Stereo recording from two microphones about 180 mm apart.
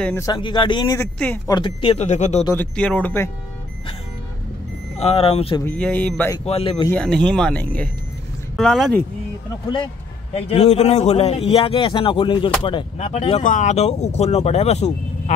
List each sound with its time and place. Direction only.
0.0 s speech: 15° left (ahead or behind)
0.4 s speech: 25° left (ahead or behind)
0.9 s speech: 10° left (ahead or behind)
1.5 s a man's voice: 30° left (ahead or behind)
2.5 s speech: 10° left (ahead or behind)
4.9 s a man's voice: 35° left (ahead or behind)
5.6 s speech: 10° left (ahead or behind)
6.4 s a man's voice: 35° left (ahead or behind)
6.9 s speech: 5° left (ahead or behind)
10.3 s a man's voice: 35° left (ahead or behind)
13.4 s a man's voice: 45° left (ahead or behind)